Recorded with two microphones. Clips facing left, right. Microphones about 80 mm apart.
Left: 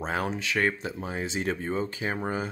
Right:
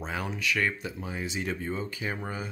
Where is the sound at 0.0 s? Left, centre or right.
Left.